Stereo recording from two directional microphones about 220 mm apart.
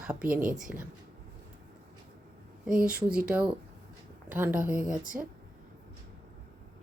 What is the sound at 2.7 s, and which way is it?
A woman's voice, 5° right (ahead or behind).